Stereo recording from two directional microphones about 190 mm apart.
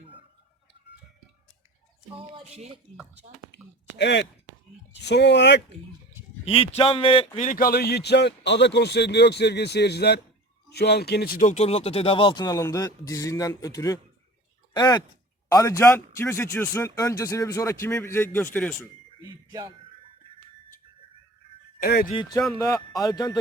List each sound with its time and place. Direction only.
3.5 s a man's voice: 65° left (ahead or behind)
6.4 s speech: 30° left (ahead or behind)
7.3 s a man's voice: 45° left (ahead or behind); by 18.9 s 10° left (ahead or behind)
19.5 s speech: 20° right (ahead or behind)
21.8 s speech: 50° left (ahead or behind)
22.1 s a man's voice: 25° left (ahead or behind)